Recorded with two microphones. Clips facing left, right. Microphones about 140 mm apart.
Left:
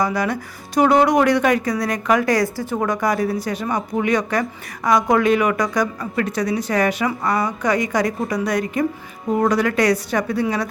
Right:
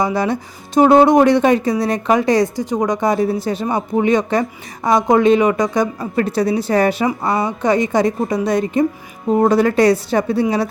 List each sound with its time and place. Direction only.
0.0 s speech: 25° right (ahead or behind)